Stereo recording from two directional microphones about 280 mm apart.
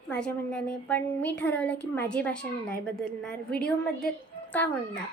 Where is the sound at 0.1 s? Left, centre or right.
Centre.